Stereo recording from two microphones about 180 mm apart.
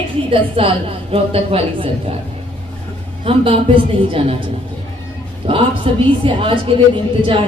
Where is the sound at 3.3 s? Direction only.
30° right (ahead or behind).